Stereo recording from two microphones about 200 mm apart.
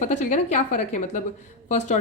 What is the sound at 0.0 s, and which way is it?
A woman's voice, 35° left (ahead or behind).